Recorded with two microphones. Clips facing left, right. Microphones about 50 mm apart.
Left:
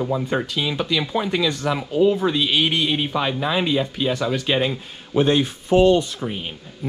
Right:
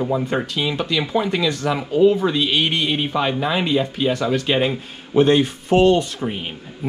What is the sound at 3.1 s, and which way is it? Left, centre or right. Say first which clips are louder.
Speech: right 2 dB; right.